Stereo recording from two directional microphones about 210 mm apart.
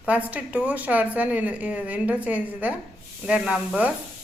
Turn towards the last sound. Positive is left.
turn(degrees=-5)  # may be behind; listen again after turning